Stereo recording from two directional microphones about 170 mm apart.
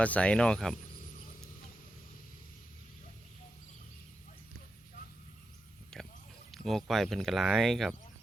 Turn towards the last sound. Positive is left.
turn(degrees=0)  # may be behind; listen again after turning